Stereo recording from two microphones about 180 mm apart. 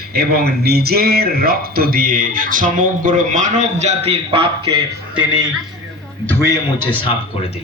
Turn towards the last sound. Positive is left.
turn(degrees=25)  # may be behind; listen again after turning